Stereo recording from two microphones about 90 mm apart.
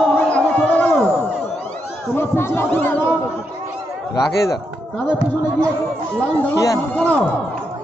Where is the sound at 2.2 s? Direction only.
25° left (ahead or behind).